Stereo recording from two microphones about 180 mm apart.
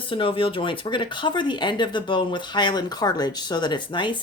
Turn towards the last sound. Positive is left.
turn(degrees=25)  # may be behind; listen again after turning